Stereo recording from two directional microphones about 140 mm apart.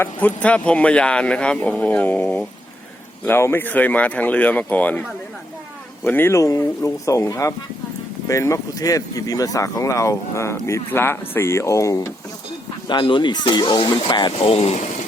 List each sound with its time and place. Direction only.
0.0 s speech: 10° left (ahead or behind)
6.1 s speech: 15° left (ahead or behind)
12.9 s speech: 35° left (ahead or behind)